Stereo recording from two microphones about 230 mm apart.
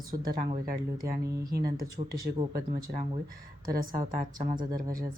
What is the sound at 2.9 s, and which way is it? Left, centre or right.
Speech, right.